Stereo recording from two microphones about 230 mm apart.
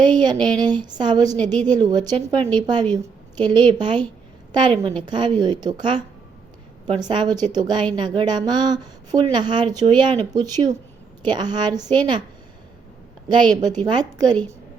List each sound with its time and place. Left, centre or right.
0.0 s a woman's voice: centre
7.1 s a woman's voice: centre
13.2 s a woman's voice: centre